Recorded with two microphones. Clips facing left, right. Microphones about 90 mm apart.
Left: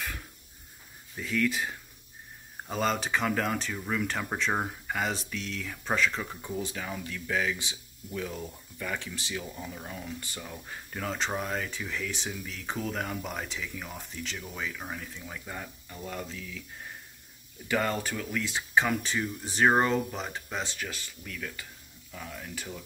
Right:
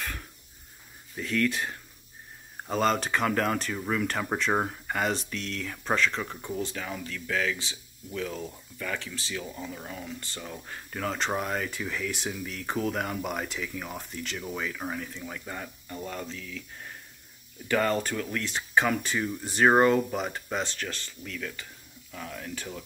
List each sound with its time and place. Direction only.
1.2 s speech: 5° left (ahead or behind)
17.6 s speech: 5° left (ahead or behind)